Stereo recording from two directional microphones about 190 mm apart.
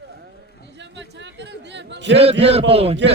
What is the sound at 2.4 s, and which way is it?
Speech, 30° right (ahead or behind).